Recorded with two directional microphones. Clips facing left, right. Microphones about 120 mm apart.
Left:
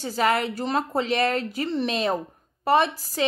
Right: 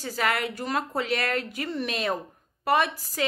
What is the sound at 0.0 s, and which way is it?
Speech, 30° left (ahead or behind).